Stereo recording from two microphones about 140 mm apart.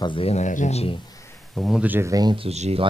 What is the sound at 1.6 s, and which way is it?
Speech, 5° right (ahead or behind).